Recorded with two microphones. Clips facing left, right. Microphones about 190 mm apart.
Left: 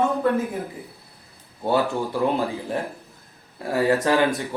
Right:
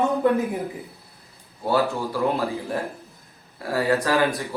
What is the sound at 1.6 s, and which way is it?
Speech, 25° left (ahead or behind).